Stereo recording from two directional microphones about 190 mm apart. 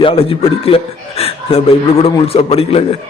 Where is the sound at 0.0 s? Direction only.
30° left (ahead or behind).